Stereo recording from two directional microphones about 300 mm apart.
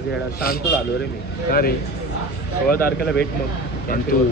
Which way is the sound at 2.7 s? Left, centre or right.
Left.